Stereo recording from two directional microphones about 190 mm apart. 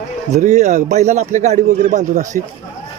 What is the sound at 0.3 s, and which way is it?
Speech, 35° right (ahead or behind).